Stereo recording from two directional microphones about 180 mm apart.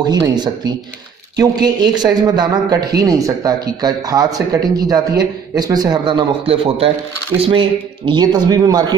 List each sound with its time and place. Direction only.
0.0 s speech: 20° right (ahead or behind)